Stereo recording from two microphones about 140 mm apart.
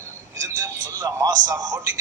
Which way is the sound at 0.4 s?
20° right (ahead or behind).